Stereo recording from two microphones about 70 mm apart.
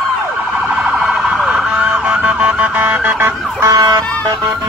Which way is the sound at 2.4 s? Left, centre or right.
Centre.